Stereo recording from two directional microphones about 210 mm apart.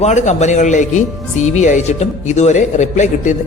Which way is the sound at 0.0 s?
35° left (ahead or behind).